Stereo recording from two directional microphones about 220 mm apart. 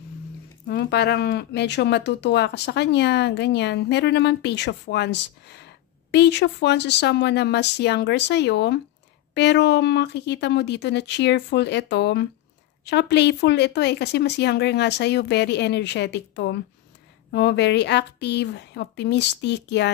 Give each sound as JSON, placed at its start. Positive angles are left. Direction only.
{"t": 0.7, "sound": "speech", "side_deg": 50}